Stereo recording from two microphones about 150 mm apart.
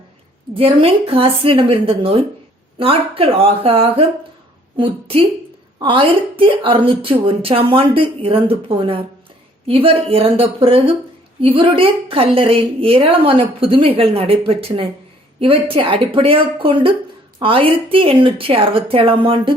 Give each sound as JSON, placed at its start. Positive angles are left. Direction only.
{"t": 0.5, "sound": "a woman's voice", "side_deg": -40}